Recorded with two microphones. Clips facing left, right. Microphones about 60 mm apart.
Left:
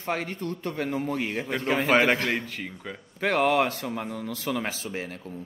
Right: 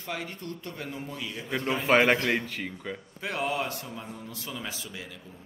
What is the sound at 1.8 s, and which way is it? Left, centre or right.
Speech, centre.